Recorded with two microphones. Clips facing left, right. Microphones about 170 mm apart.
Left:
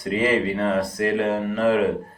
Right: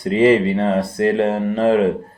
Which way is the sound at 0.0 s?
25° right (ahead or behind).